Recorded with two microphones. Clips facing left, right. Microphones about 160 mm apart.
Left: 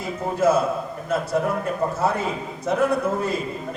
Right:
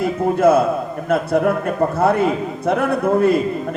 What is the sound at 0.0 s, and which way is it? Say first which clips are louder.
A man's voice: right 6 dB; 60° right (ahead or behind).